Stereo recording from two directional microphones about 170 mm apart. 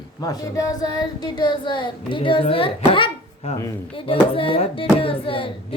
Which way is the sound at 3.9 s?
35° left (ahead or behind).